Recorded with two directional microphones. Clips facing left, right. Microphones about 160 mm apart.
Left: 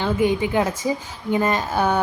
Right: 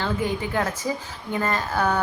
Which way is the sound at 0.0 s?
20° left (ahead or behind).